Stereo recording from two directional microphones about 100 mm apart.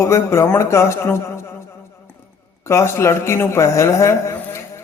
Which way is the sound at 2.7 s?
30° left (ahead or behind).